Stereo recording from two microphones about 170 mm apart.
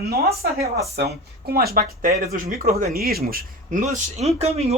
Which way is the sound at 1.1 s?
65° right (ahead or behind).